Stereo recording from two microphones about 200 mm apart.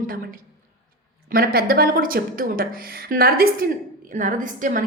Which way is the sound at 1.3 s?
45° right (ahead or behind).